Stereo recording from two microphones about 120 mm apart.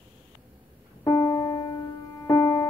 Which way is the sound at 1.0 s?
35° left (ahead or behind).